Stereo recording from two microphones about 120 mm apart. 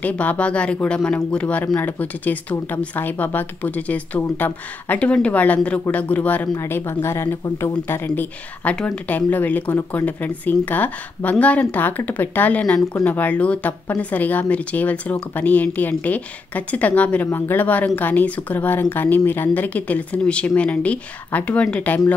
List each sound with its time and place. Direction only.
0.0 s a woman's voice: 15° left (ahead or behind)